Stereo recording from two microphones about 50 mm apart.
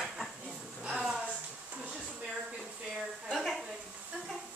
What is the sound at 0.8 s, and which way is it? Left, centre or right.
Speech, centre.